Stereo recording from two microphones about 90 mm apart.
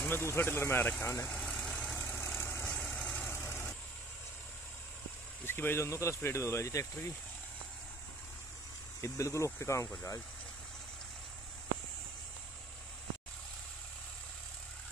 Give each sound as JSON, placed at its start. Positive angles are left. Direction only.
{"t": 0.0, "sound": "speech", "side_deg": 25}
{"t": 1.2, "sound": "vehicle", "side_deg": 10}
{"t": 2.0, "sound": "vehicle", "side_deg": 25}
{"t": 2.6, "sound": "vehicle", "side_deg": 15}
{"t": 5.4, "sound": "speech", "side_deg": 25}
{"t": 9.0, "sound": "speech", "side_deg": 35}